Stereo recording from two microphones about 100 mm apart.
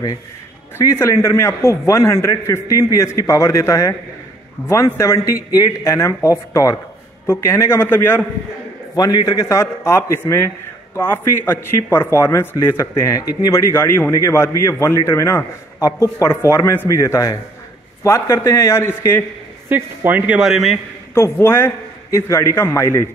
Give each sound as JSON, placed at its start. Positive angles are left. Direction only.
{"t": 0.7, "sound": "a man's voice", "side_deg": 25}
{"t": 8.9, "sound": "a man's voice", "side_deg": 40}
{"t": 19.7, "sound": "a man's voice", "side_deg": -20}
{"t": 20.3, "sound": "a man's voice", "side_deg": -5}
{"t": 21.1, "sound": "a man's voice", "side_deg": 25}